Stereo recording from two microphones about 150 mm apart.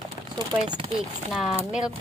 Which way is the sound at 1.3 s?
Centre (ahead or behind).